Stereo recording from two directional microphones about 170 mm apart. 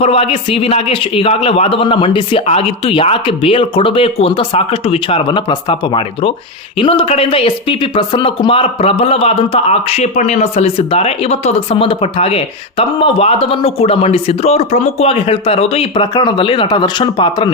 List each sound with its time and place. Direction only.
0.0 s speech: 35° left (ahead or behind)